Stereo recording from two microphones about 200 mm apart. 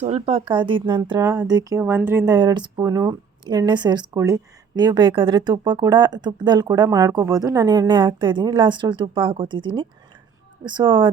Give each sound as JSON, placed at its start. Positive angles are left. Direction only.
{"t": 0.0, "sound": "speech", "side_deg": -30}